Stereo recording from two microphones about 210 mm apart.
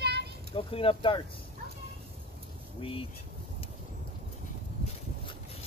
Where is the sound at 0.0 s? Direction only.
50° right (ahead or behind).